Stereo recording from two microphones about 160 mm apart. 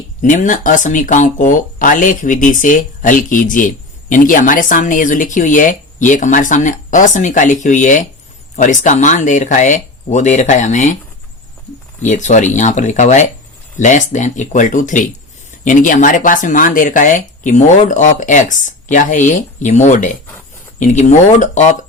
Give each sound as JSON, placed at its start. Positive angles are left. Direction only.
{"t": 0.2, "sound": "speech", "side_deg": 55}
{"t": 12.0, "sound": "speech", "side_deg": 50}